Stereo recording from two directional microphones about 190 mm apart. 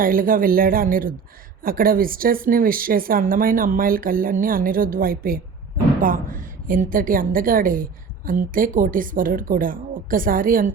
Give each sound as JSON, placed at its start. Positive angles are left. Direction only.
{"t": 0.0, "sound": "a woman's voice", "side_deg": -50}